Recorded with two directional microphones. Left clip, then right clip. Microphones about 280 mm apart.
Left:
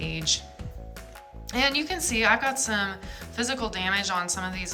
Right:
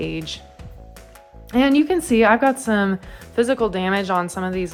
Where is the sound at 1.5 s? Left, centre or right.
Centre.